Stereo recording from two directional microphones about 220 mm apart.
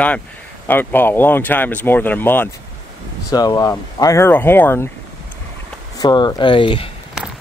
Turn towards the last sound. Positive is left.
turn(degrees=25)  # may be behind; listen again after turning